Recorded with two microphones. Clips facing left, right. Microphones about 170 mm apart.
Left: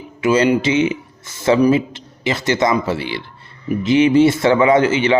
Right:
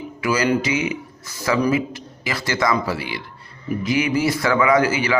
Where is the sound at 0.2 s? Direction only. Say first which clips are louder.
Left 5 dB; 25° left (ahead or behind).